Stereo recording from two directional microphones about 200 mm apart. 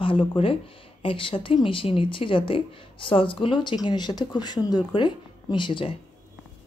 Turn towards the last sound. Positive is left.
turn(degrees=25)  # may be behind; listen again after turning